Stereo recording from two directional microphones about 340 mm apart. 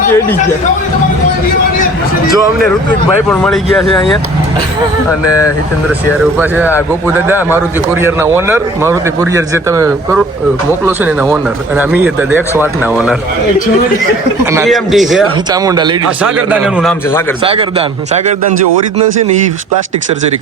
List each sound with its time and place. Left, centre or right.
3.2 s speech: centre
8.0 s a man's voice: centre
14.5 s a man's voice: centre
17.4 s a man's voice: centre